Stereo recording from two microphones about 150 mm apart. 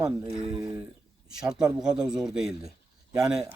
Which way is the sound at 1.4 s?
5° right (ahead or behind).